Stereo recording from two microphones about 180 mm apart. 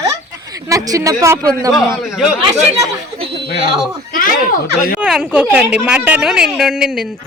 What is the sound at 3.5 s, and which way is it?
Speech, 60° left (ahead or behind).